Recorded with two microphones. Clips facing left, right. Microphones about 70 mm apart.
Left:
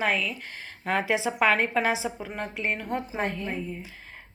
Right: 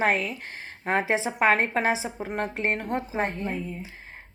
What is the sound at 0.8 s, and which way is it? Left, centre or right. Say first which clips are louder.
A woman's voice: right 1 dB; right.